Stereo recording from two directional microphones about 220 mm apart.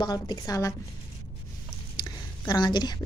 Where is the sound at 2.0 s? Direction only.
20° left (ahead or behind).